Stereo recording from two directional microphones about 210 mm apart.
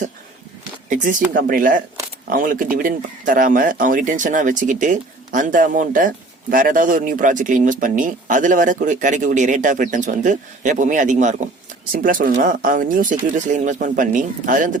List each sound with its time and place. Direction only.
0.9 s speech: 40° right (ahead or behind)